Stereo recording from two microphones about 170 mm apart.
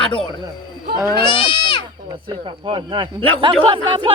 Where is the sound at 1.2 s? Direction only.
30° left (ahead or behind).